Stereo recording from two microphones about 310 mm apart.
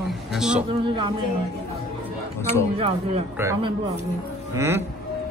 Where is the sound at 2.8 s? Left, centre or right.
Centre.